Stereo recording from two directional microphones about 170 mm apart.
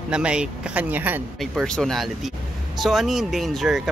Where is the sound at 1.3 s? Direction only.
Centre (ahead or behind).